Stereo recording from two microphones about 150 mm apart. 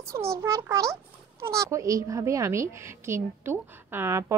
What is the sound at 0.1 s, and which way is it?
A woman's voice, 20° right (ahead or behind).